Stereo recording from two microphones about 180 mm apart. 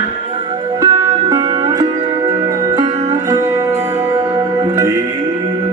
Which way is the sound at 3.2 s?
20° right (ahead or behind).